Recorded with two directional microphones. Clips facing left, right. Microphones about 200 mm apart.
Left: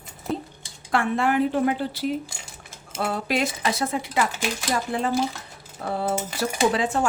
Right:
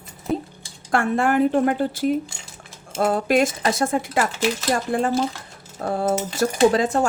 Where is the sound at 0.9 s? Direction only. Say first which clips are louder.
Right 3 dB; 50° right (ahead or behind).